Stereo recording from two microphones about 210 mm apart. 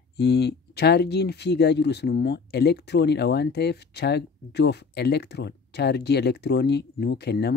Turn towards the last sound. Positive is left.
turn(degrees=50)  # may be behind; listen again after turning